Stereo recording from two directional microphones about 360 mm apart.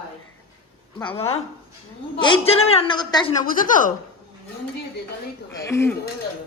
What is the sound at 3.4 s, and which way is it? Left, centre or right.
Speech, left.